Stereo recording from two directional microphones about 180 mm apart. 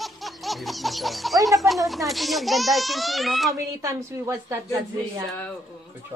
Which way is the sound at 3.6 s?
20° right (ahead or behind).